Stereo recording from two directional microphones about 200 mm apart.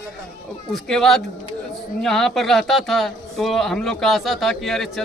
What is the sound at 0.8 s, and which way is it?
A man's voice, centre (ahead or behind).